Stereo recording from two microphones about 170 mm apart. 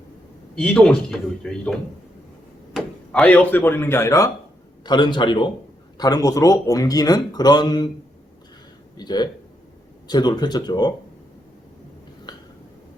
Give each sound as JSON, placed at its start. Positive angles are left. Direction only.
{"t": 0.5, "sound": "speech", "side_deg": 5}
{"t": 2.7, "sound": "speech", "side_deg": 5}
{"t": 9.0, "sound": "speech", "side_deg": 25}
{"t": 12.3, "sound": "a sound", "side_deg": 25}